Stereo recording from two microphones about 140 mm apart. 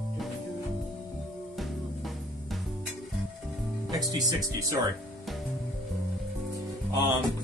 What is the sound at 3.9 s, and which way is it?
Speech, 25° right (ahead or behind).